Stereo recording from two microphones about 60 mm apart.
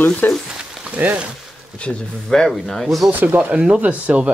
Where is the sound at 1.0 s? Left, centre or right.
Right.